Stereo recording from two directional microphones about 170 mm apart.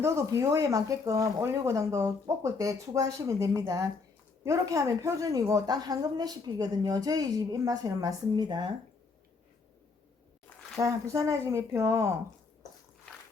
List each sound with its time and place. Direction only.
0.0 s a woman's voice: 15° right (ahead or behind)
10.8 s speech: 20° right (ahead or behind)